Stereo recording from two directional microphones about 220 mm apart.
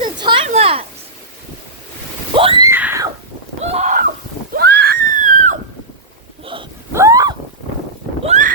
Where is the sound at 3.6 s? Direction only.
30° right (ahead or behind).